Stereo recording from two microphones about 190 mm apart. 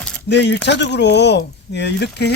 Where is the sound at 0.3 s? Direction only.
65° left (ahead or behind).